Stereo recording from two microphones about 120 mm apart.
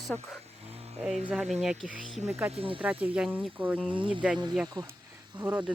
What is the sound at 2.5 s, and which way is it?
Speech, 50° right (ahead or behind).